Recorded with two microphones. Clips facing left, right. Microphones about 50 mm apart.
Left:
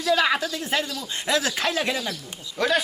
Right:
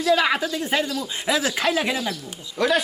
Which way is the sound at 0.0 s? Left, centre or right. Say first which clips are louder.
Right 2 dB; centre.